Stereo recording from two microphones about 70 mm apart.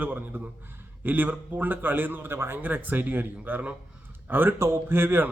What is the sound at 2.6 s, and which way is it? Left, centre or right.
A man's voice, right.